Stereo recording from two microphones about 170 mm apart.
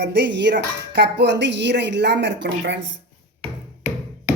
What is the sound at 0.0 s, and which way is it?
Speech, 85° right.